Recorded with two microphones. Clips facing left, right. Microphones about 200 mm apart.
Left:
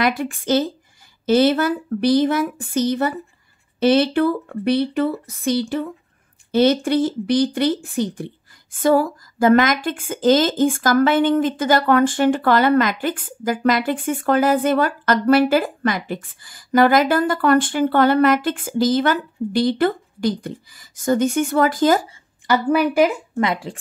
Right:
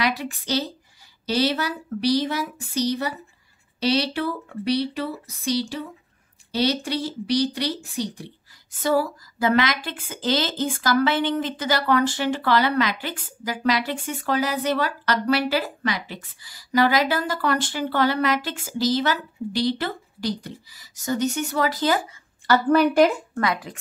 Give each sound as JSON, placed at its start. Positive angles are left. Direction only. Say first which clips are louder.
{"t": 0.0, "sound": "a woman's voice", "louder": "left 5 dB", "side_deg": 50}
{"t": 22.5, "sound": "a woman's voice", "louder": "even", "side_deg": 10}
{"t": 23.4, "sound": "speech", "louder": "left 4 dB", "side_deg": 25}